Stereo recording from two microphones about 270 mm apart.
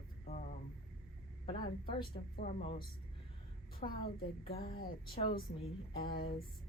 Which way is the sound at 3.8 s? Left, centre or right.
Left.